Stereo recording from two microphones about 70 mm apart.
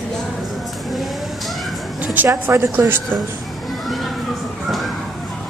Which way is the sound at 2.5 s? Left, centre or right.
Right.